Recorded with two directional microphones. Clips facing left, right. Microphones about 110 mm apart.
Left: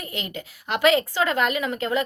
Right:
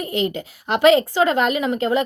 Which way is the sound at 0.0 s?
30° right (ahead or behind).